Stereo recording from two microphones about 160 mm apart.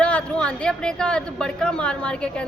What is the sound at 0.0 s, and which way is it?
A woman's voice, 5° left (ahead or behind).